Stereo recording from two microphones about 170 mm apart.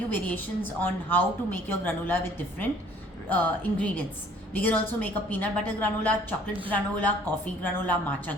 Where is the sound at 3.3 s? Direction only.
10° left (ahead or behind).